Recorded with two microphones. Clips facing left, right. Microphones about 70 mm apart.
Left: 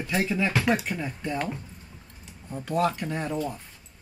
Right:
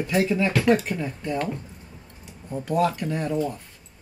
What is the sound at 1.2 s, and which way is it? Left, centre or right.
Speech, centre.